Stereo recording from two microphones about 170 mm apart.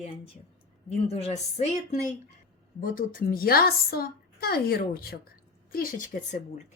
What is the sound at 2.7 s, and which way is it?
A woman's voice, 55° left (ahead or behind).